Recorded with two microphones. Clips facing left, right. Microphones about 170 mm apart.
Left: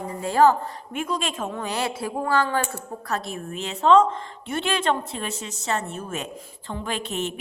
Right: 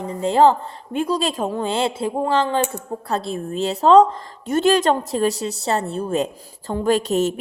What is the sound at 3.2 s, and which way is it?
A woman's voice, 30° right (ahead or behind).